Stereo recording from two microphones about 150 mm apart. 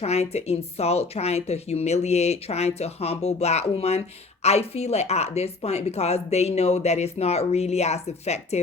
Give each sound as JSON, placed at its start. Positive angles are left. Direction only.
{"t": 0.0, "sound": "speech", "side_deg": 45}